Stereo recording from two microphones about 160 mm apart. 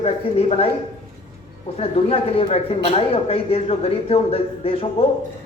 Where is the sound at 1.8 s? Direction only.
40° left (ahead or behind).